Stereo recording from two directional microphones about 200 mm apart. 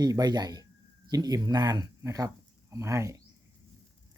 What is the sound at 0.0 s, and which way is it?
Speech, 20° right (ahead or behind).